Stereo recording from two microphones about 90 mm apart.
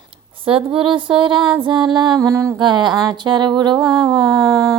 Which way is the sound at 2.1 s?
35° right (ahead or behind).